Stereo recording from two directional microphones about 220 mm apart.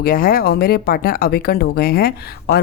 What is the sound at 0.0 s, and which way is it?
A woman's voice, 40° left (ahead or behind).